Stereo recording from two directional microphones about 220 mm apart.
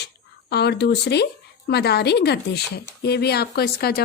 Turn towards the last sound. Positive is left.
turn(degrees=45)  # may be behind; listen again after turning